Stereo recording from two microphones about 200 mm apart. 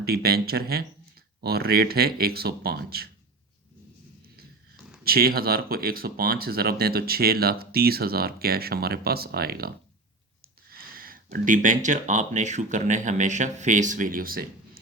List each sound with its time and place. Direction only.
0.0 s speech: 50° right (ahead or behind)
5.0 s speech: 50° right (ahead or behind)